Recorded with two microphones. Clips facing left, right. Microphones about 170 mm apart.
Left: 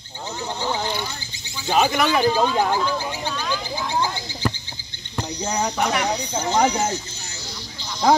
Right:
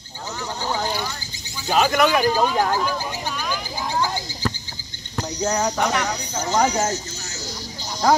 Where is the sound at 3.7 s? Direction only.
40° right (ahead or behind).